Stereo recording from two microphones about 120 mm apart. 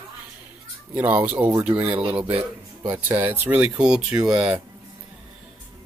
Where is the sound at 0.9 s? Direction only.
15° right (ahead or behind).